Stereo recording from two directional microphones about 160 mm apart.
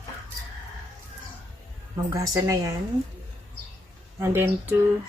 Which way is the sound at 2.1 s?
20° right (ahead or behind).